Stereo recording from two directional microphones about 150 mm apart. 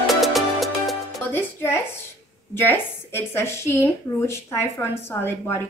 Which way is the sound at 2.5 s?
15° left (ahead or behind).